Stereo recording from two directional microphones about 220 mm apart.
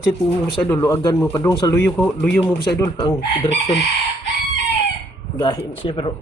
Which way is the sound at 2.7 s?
15° left (ahead or behind).